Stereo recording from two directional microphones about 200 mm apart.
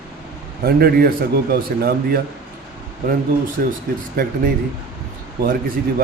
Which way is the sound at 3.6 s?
45° right (ahead or behind).